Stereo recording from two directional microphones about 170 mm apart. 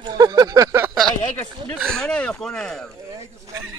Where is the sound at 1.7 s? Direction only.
5° left (ahead or behind).